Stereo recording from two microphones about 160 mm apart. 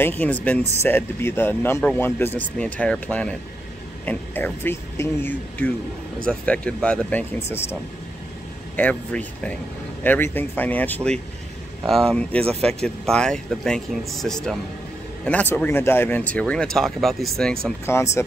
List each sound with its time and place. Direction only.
0.0 s speech: 10° left (ahead or behind)
8.7 s speech: 10° left (ahead or behind)
17.8 s speech: 15° left (ahead or behind)